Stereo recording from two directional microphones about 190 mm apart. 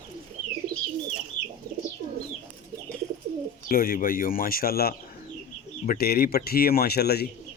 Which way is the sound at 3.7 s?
50° left (ahead or behind).